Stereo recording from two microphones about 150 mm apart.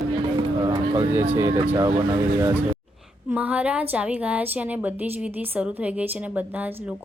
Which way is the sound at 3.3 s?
10° right (ahead or behind).